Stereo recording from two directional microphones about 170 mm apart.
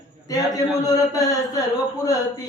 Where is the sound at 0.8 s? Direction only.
20° left (ahead or behind).